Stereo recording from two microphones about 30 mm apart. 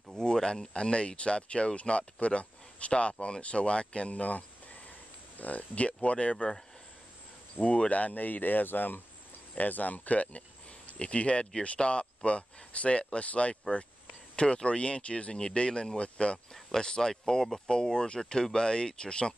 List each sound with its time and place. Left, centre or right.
0.2 s speech: left
4.1 s speech: left
7.6 s speech: left
7.9 s speech: left
9.6 s speech: left
11.1 s speech: left
16.8 s speech: left